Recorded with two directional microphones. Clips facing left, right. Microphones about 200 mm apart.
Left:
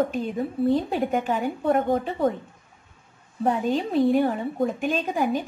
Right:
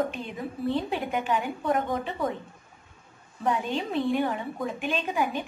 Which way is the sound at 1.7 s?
30° left (ahead or behind).